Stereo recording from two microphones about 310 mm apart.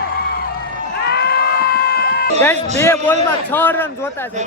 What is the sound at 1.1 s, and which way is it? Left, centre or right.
Screaming, left.